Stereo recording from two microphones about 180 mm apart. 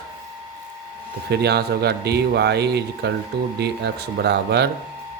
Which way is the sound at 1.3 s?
65° right (ahead or behind).